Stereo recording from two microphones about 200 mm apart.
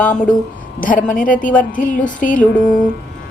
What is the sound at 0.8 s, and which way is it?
A woman's voice, 40° left (ahead or behind).